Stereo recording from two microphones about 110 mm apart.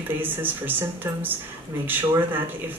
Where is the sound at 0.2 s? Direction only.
20° right (ahead or behind).